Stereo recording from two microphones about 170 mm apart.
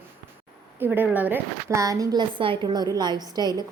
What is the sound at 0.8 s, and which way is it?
A woman's voice, 10° right (ahead or behind).